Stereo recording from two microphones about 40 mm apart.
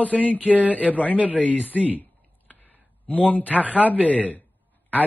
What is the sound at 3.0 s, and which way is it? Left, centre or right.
A man's voice, left.